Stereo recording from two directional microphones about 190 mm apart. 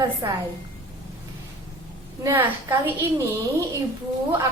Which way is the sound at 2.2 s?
10° right (ahead or behind).